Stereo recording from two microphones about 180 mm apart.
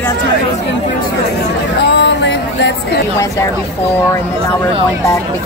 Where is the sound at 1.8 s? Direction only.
70° left (ahead or behind).